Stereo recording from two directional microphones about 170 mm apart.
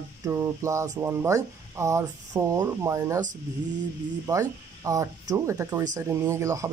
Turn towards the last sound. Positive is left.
turn(degrees=-20)  # may be behind; listen again after turning